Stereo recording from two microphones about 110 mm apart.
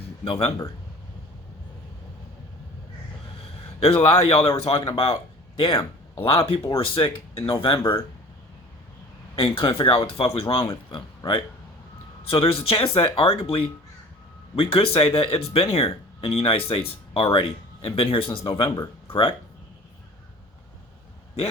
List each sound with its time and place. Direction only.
0.3 s speech: 60° left (ahead or behind)
3.8 s speech: 65° left (ahead or behind)
9.3 s speech: 50° left (ahead or behind)
19.0 s a sound: 55° left (ahead or behind)